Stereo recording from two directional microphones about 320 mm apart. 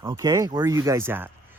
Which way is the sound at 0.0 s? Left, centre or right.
Centre.